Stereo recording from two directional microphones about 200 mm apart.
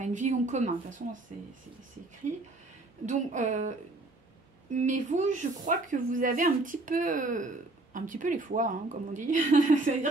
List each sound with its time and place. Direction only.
0.0 s a woman's voice: 35° right (ahead or behind)
3.1 s a woman's voice: 35° right (ahead or behind)
4.7 s a woman's voice: 40° right (ahead or behind)